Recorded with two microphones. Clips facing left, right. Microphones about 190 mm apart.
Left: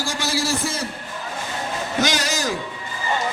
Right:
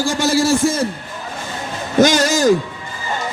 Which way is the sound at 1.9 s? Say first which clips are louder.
Right 11 dB; 50° right (ahead or behind).